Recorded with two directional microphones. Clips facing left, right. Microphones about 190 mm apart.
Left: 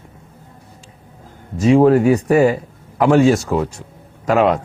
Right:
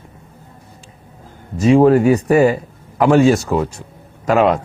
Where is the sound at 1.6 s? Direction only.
15° right (ahead or behind).